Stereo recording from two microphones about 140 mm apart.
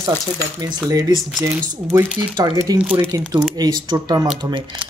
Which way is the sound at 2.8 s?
10° right (ahead or behind).